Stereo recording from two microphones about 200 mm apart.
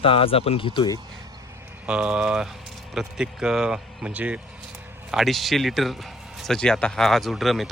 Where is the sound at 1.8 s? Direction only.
5° right (ahead or behind).